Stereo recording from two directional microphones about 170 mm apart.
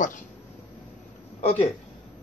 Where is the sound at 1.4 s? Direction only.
40° left (ahead or behind).